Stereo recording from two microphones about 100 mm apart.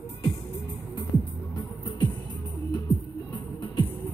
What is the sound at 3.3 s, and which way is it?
Music, 50° left (ahead or behind).